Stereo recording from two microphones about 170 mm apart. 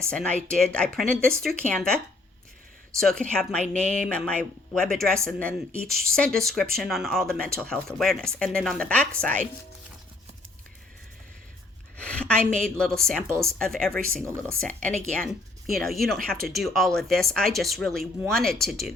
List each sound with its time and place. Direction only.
0.1 s speech: 5° left (ahead or behind)
3.0 s speech: 5° left (ahead or behind)
11.9 s a woman's voice: 5° left (ahead or behind)